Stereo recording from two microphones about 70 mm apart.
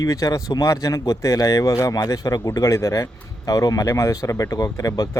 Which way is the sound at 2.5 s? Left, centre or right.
Left.